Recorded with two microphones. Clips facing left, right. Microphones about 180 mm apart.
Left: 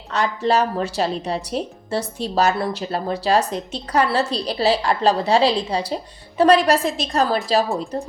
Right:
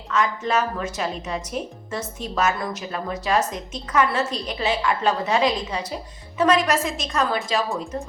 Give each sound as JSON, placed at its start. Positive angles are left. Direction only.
{"t": 0.1, "sound": "a woman's voice", "side_deg": 35}